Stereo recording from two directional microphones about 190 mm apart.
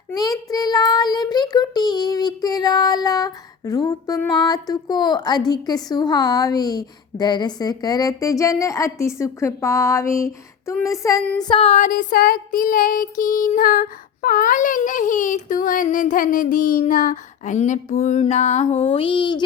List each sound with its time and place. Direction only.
0.1 s a child's voice: 20° left (ahead or behind)
11.4 s female singing: 30° left (ahead or behind)
18.9 s a sound: 25° left (ahead or behind)